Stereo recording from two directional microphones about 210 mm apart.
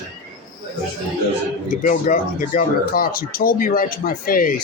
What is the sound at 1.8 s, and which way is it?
Speech, 40° left (ahead or behind).